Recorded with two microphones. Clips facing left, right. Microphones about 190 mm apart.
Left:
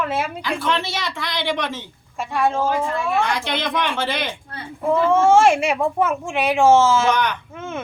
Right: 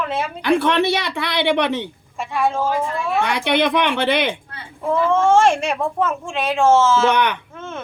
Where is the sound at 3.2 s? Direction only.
65° right (ahead or behind).